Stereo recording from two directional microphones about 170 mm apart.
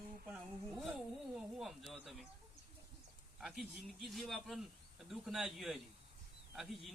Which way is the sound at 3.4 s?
Centre (ahead or behind).